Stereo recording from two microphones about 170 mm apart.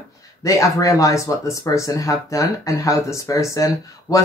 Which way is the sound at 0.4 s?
20° left (ahead or behind).